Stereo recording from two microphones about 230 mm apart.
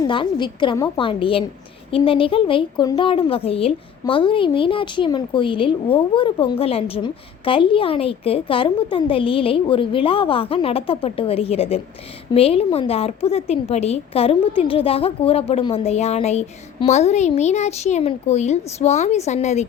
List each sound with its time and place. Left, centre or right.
0.0 s speech: left